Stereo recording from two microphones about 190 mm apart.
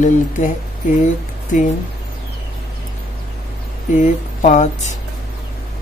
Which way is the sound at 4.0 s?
40° left (ahead or behind).